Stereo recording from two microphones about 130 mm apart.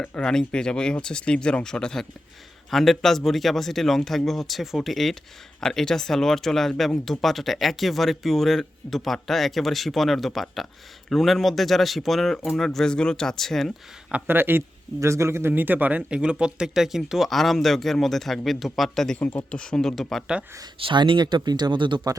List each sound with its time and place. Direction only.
0.0 s a man's voice: 10° left (ahead or behind)
14.1 s a man's voice: 15° right (ahead or behind)
20.7 s speech: 40° right (ahead or behind)